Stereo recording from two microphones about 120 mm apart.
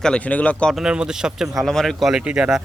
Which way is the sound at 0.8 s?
5° right (ahead or behind).